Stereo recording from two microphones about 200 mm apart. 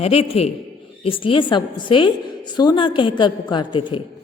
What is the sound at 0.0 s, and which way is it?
A man's voice, 30° left (ahead or behind).